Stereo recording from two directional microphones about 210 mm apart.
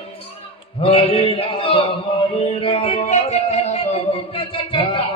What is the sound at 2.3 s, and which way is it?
Music, 25° left (ahead or behind).